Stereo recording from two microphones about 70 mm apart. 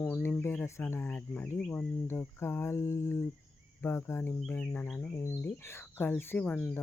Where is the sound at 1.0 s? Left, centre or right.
Left.